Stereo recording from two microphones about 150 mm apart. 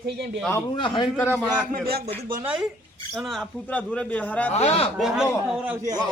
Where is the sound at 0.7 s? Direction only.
35° left (ahead or behind).